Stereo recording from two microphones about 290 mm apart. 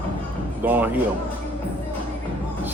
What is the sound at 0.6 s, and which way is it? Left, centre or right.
Speech, centre.